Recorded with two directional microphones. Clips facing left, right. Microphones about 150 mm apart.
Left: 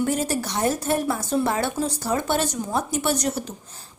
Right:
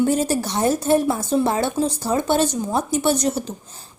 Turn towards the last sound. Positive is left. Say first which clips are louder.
# right 4 dB
turn(degrees=-25)  # may be behind; listen again after turning